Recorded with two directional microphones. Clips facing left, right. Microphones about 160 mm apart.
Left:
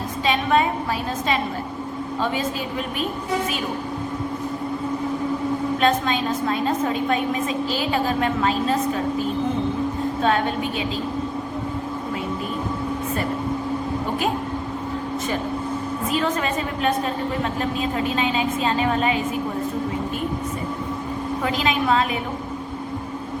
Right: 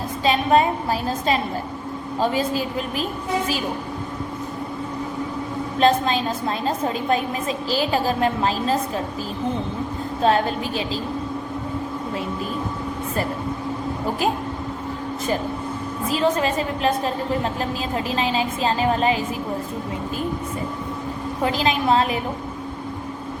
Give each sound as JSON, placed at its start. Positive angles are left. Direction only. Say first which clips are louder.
{"t": 0.3, "sound": "a woman's voice", "louder": "right 2 dB", "side_deg": -35}
{"t": 5.8, "sound": "a woman's voice", "louder": "right 4 dB", "side_deg": -30}
{"t": 10.2, "sound": "a woman's voice", "louder": "right 3 dB", "side_deg": -35}
{"t": 16.0, "sound": "a woman's voice", "louder": "right 4 dB", "side_deg": -30}
{"t": 21.4, "sound": "a woman's voice", "louder": "right 2 dB", "side_deg": -35}